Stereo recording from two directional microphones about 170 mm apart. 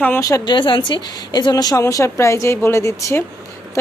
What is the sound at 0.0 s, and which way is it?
A woman's voice, 15° left (ahead or behind).